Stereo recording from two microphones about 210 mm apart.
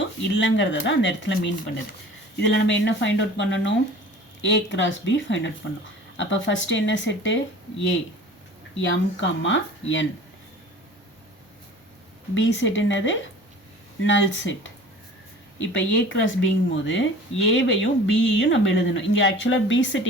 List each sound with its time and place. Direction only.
0.3 s a woman's voice: 60° left (ahead or behind)
8.8 s a woman's voice: 60° left (ahead or behind)
12.3 s a woman's voice: 60° left (ahead or behind)